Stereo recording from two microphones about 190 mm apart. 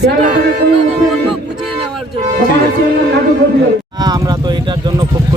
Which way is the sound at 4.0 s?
20° right (ahead or behind).